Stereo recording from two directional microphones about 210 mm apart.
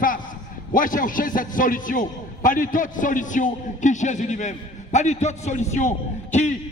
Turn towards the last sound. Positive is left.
turn(degrees=35)  # may be behind; listen again after turning